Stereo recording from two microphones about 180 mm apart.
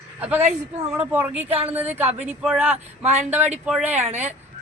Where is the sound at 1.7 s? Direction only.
10° right (ahead or behind).